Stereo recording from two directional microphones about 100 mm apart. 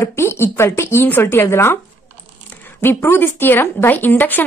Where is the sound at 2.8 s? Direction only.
25° left (ahead or behind).